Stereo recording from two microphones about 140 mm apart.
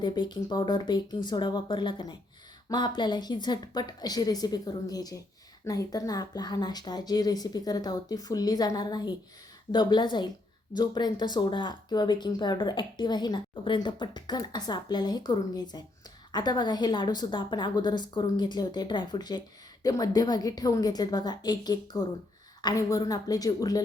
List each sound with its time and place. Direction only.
0.0 s speech: 30° left (ahead or behind)